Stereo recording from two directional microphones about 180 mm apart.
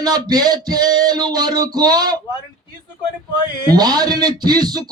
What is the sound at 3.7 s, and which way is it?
Speech, 20° right (ahead or behind).